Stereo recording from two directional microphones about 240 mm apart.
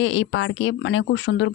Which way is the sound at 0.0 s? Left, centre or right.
Left.